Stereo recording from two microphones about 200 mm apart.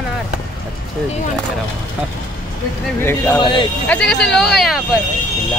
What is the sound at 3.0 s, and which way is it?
Speech, 10° left (ahead or behind).